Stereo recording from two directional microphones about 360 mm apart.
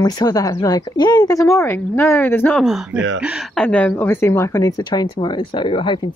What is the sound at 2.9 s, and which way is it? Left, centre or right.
Speech, right.